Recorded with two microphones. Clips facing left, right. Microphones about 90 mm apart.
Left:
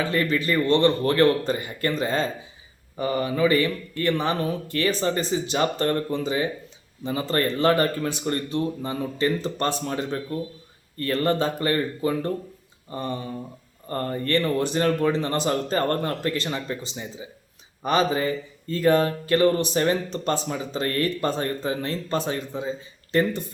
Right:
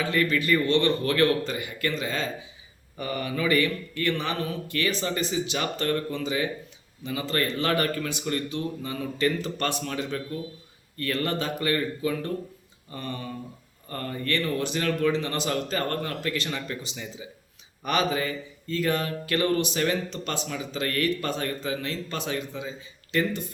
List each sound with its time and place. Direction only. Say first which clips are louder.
0.1 s speech: even; 30° left (ahead or behind)